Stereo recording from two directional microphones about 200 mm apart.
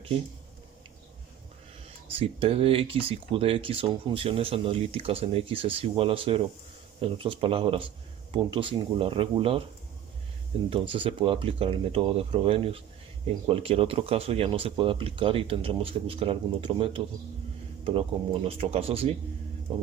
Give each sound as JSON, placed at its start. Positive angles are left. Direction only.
{"t": 2.1, "sound": "speech", "side_deg": -30}
{"t": 10.7, "sound": "speech", "side_deg": -25}